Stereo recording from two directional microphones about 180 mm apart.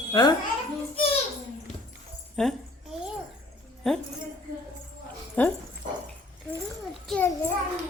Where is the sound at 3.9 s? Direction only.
5° left (ahead or behind).